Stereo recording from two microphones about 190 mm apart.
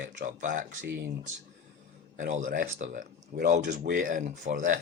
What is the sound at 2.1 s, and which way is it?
Speech, 45° right (ahead or behind).